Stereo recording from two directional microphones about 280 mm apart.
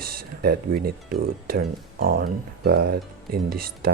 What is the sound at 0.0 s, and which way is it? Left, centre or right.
Speech, right.